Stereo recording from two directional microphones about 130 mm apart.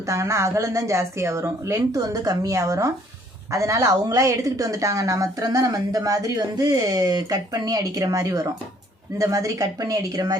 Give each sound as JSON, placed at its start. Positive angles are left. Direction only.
{"t": 0.0, "sound": "a woman's voice", "side_deg": -25}